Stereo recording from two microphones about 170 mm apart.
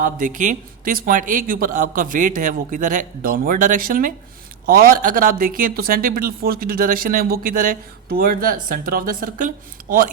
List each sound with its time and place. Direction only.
0.0 s a man's voice: 50° right (ahead or behind)